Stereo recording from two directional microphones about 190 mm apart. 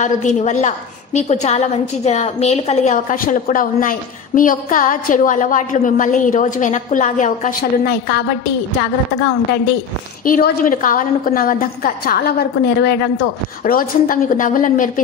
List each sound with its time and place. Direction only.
0.0 s a woman's voice: 40° left (ahead or behind); by 8.3 s 55° left (ahead or behind)
10.2 s a woman's voice: 45° left (ahead or behind)